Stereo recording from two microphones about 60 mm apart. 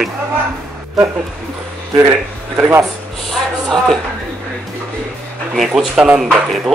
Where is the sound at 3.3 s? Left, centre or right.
Centre.